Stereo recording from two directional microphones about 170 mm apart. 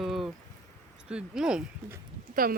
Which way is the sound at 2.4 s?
55° right (ahead or behind).